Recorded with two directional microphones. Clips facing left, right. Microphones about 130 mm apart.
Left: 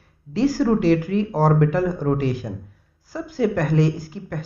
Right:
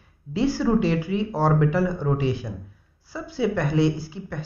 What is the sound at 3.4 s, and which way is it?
Speech, 50° left (ahead or behind).